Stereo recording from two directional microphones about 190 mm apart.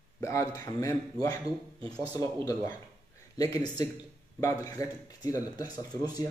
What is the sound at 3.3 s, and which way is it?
Speech, 15° left (ahead or behind).